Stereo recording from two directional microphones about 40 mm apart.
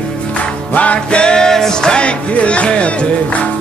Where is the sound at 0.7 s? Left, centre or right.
Left.